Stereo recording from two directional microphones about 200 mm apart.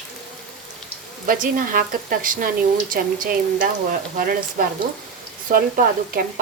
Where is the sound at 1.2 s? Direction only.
45° right (ahead or behind).